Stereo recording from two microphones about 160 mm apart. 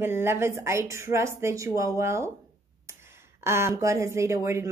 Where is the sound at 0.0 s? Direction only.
15° right (ahead or behind).